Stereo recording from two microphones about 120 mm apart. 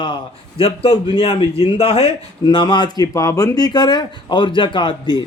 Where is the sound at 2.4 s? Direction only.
40° left (ahead or behind).